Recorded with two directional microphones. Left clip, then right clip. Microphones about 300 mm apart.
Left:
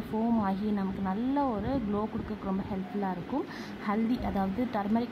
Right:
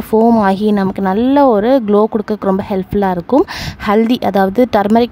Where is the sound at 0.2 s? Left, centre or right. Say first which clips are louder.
Right 19 dB; right.